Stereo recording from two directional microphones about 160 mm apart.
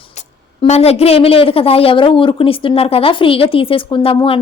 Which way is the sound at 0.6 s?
40° left (ahead or behind).